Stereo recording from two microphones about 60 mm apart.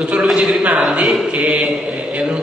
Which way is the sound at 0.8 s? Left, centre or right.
Centre.